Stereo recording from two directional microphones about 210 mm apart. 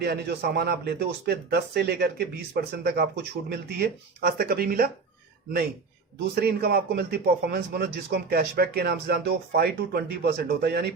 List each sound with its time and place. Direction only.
0.0 s a man's voice: 50° right (ahead or behind)
6.3 s a man's voice: 45° right (ahead or behind)